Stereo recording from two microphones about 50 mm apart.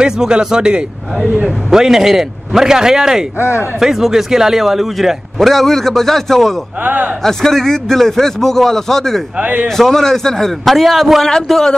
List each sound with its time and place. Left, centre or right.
0.0 s a man's voice: centre
6.8 s a man's voice: right
7.2 s speech: centre
9.4 s a man's voice: right
9.7 s a man's voice: centre
11.4 s speech: centre